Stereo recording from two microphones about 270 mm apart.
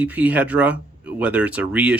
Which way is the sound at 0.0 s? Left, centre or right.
Centre.